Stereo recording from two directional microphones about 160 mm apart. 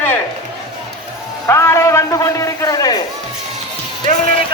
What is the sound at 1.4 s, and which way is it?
A man's voice, 15° left (ahead or behind).